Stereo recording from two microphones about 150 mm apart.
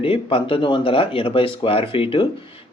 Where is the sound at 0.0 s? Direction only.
40° left (ahead or behind).